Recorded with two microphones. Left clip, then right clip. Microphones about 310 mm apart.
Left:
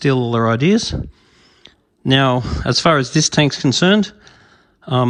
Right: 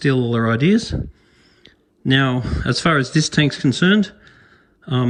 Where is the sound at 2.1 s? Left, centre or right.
Centre.